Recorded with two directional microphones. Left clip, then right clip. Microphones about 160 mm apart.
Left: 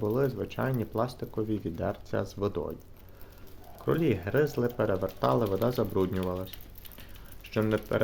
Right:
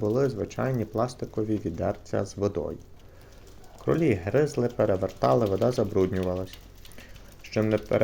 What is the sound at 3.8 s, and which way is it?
Speech, 5° right (ahead or behind).